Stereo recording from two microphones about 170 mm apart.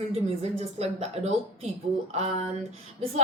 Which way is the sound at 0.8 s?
40° right (ahead or behind).